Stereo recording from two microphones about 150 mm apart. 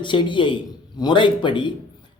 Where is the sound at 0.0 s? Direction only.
30° left (ahead or behind).